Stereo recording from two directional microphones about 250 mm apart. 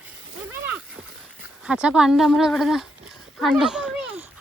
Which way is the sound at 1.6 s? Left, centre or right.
Centre.